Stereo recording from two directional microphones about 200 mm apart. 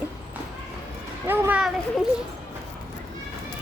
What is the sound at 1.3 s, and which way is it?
Speech, 5° right (ahead or behind).